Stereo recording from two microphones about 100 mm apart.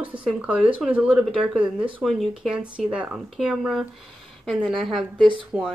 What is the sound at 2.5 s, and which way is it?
Speech, 10° right (ahead or behind).